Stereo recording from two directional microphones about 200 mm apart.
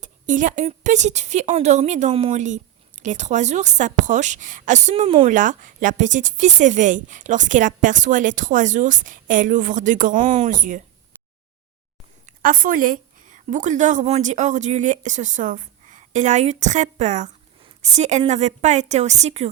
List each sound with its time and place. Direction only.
0.0 s speech: 40° right (ahead or behind)
5.3 s speech: 40° right (ahead or behind)
10.2 s speech: 25° right (ahead or behind)
10.5 s speech: 40° right (ahead or behind)
12.2 s a woman's voice: 40° right (ahead or behind)